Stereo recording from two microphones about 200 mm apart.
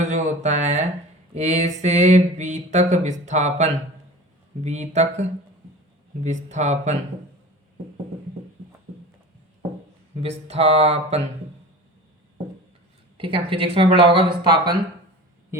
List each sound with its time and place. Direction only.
0.0 s a sound: 35° right (ahead or behind)
1.3 s speech: 35° right (ahead or behind)
10.2 s speech: 30° right (ahead or behind)
13.1 s speech: 25° right (ahead or behind)